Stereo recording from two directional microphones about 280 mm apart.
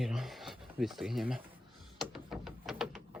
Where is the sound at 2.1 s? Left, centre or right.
Centre.